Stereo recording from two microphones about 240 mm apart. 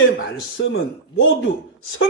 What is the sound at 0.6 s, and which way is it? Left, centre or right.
Speech, left.